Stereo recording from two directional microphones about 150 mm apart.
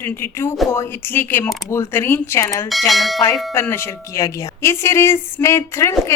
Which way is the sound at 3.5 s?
15° left (ahead or behind).